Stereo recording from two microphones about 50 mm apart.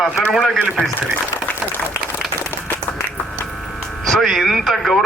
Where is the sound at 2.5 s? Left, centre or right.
Left.